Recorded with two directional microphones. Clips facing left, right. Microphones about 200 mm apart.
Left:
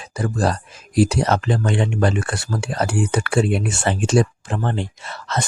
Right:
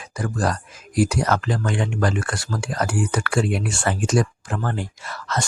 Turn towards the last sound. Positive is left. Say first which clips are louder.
# left 1 dB
turn(degrees=25)  # may be behind; listen again after turning